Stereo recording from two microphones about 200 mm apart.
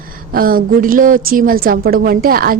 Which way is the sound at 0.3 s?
45° right (ahead or behind).